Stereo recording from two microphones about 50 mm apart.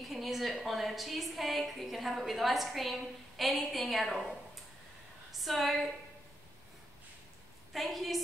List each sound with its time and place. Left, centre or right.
0.0 s a woman's voice: centre
7.7 s a woman's voice: centre